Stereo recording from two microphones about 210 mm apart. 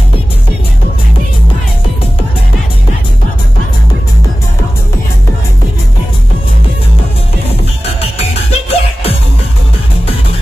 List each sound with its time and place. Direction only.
7.8 s music: 30° left (ahead or behind)